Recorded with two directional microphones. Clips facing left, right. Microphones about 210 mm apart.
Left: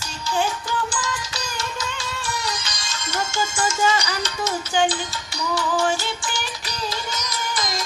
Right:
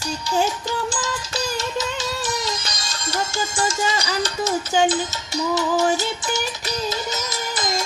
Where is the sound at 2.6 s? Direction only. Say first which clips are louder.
Right 2 dB; 35° right (ahead or behind).